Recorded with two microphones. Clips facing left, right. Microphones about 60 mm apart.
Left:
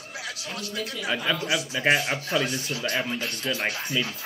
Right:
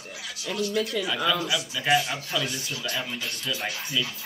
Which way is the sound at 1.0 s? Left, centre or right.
Left.